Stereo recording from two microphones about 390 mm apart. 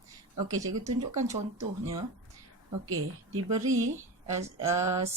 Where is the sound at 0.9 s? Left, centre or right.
Centre.